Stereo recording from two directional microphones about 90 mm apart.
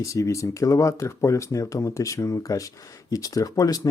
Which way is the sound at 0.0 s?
35° left (ahead or behind).